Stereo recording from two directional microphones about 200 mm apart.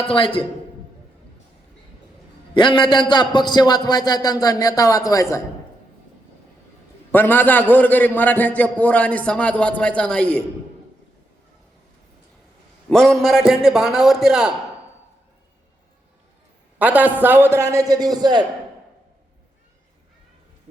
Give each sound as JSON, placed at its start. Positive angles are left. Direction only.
{"t": 0.0, "sound": "a man's voice", "side_deg": 25}
{"t": 2.6, "sound": "a man's voice", "side_deg": 25}
{"t": 7.1, "sound": "a man's voice", "side_deg": 10}
{"t": 12.9, "sound": "a man's voice", "side_deg": 0}
{"t": 16.7, "sound": "a man's voice", "side_deg": -10}